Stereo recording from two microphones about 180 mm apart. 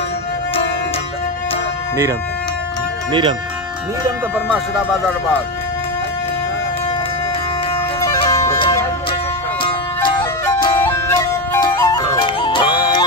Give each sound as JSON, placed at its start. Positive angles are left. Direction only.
{"t": 3.1, "sound": "speech", "side_deg": -25}
{"t": 8.0, "sound": "music", "side_deg": 25}